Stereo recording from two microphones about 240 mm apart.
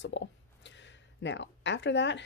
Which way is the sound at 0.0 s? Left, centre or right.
Left.